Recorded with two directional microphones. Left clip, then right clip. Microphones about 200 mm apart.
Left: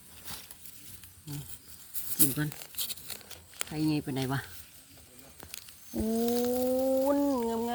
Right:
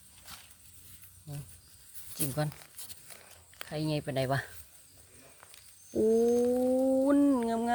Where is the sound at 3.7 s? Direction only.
45° right (ahead or behind).